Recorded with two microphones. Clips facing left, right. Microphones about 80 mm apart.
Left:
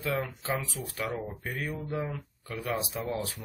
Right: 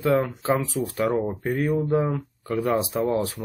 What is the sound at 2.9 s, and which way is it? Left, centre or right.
Speech, right.